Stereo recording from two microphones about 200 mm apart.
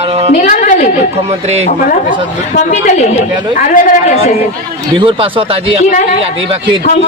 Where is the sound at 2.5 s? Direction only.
35° left (ahead or behind).